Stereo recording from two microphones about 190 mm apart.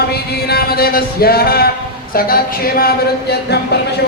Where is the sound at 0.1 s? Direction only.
55° left (ahead or behind).